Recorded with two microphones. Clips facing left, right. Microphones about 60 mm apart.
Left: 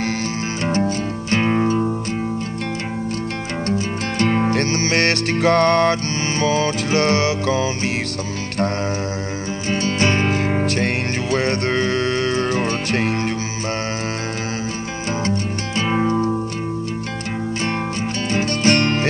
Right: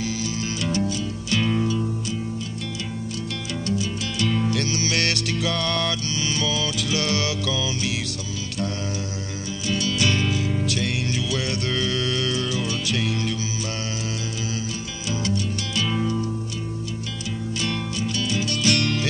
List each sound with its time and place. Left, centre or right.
0.0 s music: left
3.6 s music: left
9.7 s music: left
15.0 s music: left
18.3 s music: left